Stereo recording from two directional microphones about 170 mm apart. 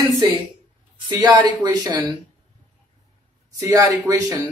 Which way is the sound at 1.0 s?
25° right (ahead or behind).